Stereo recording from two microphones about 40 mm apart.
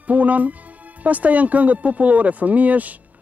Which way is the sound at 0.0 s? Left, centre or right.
Right.